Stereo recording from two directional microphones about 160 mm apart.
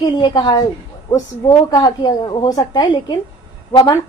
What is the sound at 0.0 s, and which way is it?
A woman's voice, 30° left (ahead or behind).